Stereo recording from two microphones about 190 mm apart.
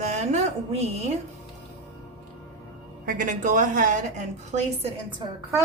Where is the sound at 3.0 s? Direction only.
45° right (ahead or behind).